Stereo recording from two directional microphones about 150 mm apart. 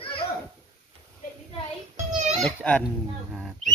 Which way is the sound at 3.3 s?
Centre (ahead or behind).